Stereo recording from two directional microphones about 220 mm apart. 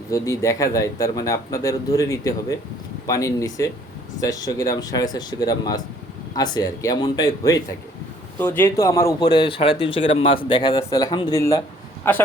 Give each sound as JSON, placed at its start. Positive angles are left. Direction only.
{"t": 0.1, "sound": "a man's voice", "side_deg": 15}